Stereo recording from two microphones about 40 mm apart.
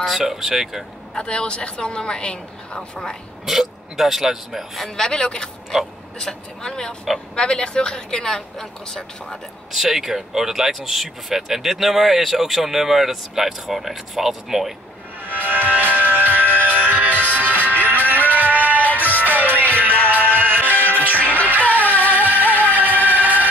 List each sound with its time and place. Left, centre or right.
0.0 s speech: centre
1.1 s a woman's voice: left
3.4 s speech: centre
4.9 s a woman's voice: centre
8.2 s speech: centre
9.7 s speech: centre
15.2 s music: right
18.8 s music: left
19.1 s music: right
20.0 s music: left
20.2 s music: right